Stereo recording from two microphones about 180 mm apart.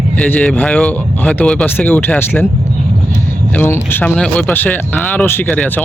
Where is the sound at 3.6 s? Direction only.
10° left (ahead or behind).